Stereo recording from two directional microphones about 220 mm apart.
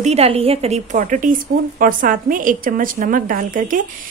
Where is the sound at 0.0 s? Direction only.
30° right (ahead or behind).